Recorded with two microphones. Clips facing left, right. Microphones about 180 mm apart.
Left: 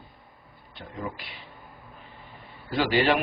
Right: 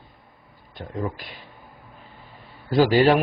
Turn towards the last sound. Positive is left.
turn(degrees=-40)  # may be behind; listen again after turning